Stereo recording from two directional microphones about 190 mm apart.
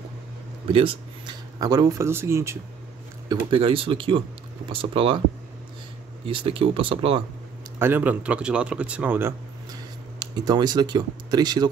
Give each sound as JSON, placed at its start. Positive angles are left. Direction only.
{"t": 0.7, "sound": "speech", "side_deg": -30}
{"t": 3.3, "sound": "speech", "side_deg": -25}
{"t": 6.2, "sound": "speech", "side_deg": -30}
{"t": 7.8, "sound": "speech", "side_deg": -10}
{"t": 10.1, "sound": "speech", "side_deg": -20}